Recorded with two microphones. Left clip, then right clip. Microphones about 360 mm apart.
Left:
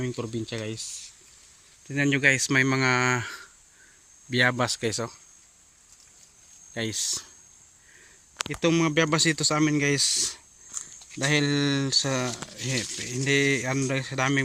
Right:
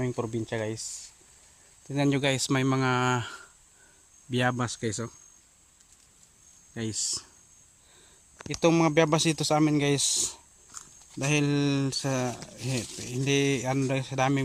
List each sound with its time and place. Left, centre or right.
0.0 s speech: centre
1.9 s speech: centre
6.7 s speech: centre
8.4 s speech: centre